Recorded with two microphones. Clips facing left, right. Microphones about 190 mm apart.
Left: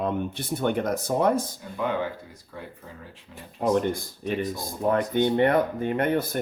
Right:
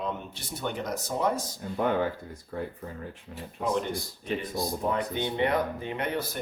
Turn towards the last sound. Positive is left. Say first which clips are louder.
# left 7 dB
turn(degrees=50)  # may be behind; listen again after turning